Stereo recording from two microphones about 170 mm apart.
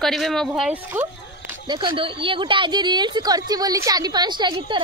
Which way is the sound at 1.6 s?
30° right (ahead or behind).